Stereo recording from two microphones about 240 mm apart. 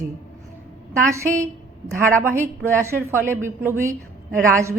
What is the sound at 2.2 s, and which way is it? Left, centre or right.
A woman's voice, centre.